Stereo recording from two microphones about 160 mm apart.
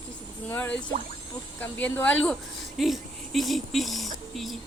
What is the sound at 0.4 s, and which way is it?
Speech, 10° left (ahead or behind).